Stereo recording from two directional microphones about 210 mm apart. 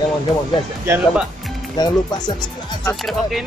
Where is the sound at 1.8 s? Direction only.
20° left (ahead or behind).